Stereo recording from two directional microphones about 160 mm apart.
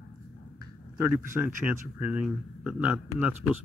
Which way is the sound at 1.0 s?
15° right (ahead or behind).